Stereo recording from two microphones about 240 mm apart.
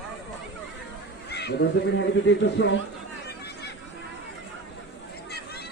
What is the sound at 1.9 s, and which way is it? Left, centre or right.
Speech, left.